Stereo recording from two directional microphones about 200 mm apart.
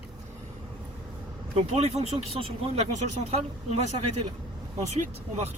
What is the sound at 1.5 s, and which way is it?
Speech, 30° right (ahead or behind).